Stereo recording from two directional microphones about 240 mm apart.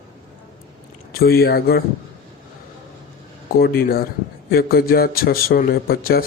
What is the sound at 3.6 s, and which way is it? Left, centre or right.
Speech, left.